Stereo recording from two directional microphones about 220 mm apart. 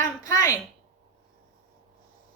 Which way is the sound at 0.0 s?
15° left (ahead or behind).